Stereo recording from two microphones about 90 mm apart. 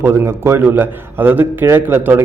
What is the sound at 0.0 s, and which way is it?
A man's voice, 25° right (ahead or behind).